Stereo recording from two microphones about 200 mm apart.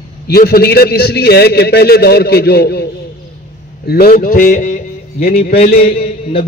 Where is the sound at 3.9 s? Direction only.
50° left (ahead or behind).